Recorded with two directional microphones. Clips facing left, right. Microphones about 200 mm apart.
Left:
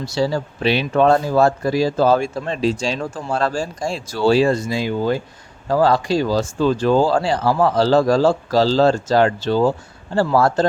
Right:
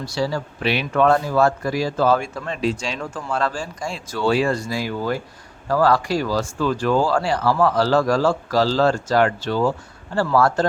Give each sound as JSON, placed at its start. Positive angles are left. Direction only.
{"t": 0.0, "sound": "speech", "side_deg": 25}